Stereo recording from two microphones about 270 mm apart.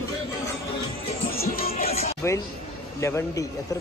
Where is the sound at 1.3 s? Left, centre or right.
Left.